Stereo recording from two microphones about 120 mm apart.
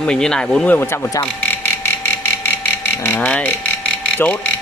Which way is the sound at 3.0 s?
15° left (ahead or behind).